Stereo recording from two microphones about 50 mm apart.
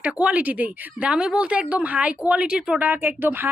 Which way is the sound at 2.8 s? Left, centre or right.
Right.